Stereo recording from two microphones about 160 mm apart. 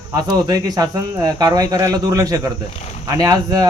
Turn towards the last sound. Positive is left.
turn(degrees=-20)  # may be behind; listen again after turning